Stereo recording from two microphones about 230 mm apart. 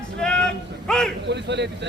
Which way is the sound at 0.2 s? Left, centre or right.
Centre.